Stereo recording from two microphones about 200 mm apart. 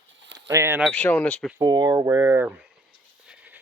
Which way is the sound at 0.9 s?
10° left (ahead or behind).